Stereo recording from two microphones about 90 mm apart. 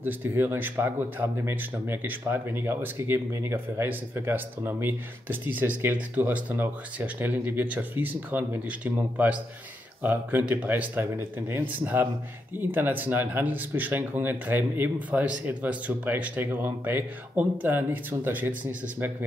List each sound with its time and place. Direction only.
0.0 s speech: 25° right (ahead or behind)